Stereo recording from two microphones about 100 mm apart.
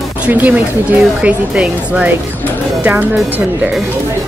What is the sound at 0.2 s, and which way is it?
Speech, 15° right (ahead or behind).